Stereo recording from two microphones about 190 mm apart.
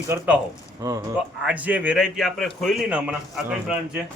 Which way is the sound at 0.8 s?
15° right (ahead or behind).